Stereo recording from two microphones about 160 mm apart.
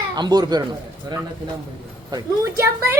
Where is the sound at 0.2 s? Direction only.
25° right (ahead or behind).